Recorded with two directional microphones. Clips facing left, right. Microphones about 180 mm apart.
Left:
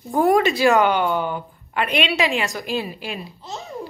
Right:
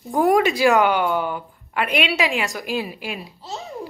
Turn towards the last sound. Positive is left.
turn(degrees=-10)  # may be behind; listen again after turning